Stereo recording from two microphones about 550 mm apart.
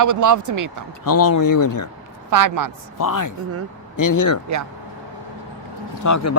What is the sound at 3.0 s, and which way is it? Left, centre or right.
Speech, left.